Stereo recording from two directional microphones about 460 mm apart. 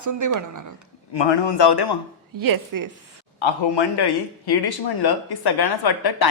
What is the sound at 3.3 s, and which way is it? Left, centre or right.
Speech, left.